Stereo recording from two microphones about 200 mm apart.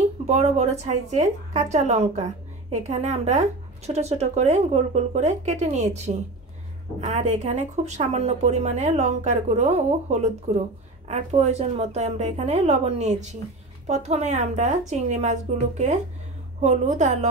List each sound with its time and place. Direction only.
0.3 s speech: 35° right (ahead or behind)